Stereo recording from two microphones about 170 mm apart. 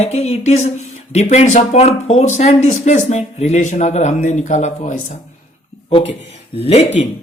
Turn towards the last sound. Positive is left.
turn(degrees=40)  # may be behind; listen again after turning